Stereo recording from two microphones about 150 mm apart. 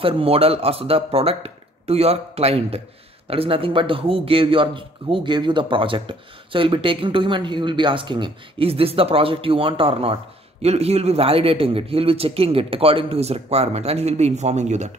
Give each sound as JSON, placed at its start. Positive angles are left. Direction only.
{"t": 0.0, "sound": "a man's voice", "side_deg": -40}